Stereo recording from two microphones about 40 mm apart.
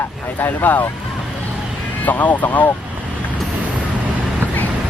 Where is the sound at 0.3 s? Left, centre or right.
Left.